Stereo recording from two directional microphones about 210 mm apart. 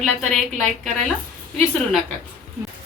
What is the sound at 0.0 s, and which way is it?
A woman's voice, centre (ahead or behind).